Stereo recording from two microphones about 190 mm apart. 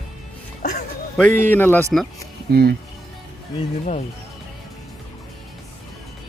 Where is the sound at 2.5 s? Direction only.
55° right (ahead or behind).